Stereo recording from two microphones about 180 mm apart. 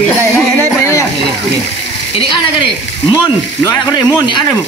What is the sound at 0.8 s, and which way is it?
Speech, 15° left (ahead or behind).